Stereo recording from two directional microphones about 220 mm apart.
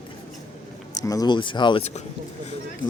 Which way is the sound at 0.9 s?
15° left (ahead or behind).